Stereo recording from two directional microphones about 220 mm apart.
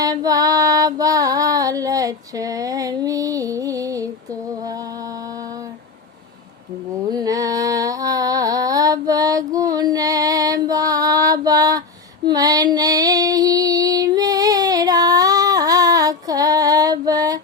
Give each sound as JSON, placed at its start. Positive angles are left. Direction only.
{"t": 0.0, "sound": "female singing", "side_deg": -15}
{"t": 7.1, "sound": "a sound", "side_deg": -15}
{"t": 12.2, "sound": "female singing", "side_deg": -15}